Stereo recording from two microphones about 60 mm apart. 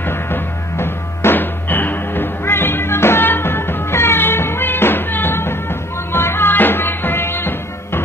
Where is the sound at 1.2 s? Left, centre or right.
Left.